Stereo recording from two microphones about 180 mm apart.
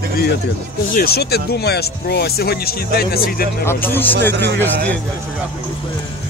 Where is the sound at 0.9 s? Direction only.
60° left (ahead or behind).